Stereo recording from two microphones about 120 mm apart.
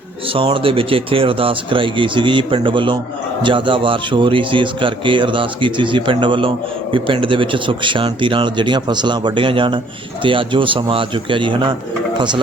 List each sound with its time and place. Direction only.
0.3 s speech: 45° right (ahead or behind)